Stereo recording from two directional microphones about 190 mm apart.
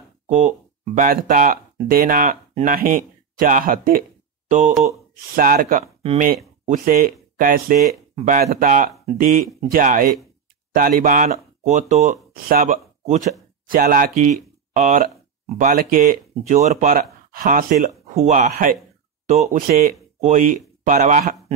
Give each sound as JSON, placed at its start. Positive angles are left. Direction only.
{"t": 0.3, "sound": "speech", "side_deg": -40}